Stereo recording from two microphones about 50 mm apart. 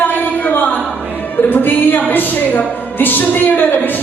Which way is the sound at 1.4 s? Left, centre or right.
Left.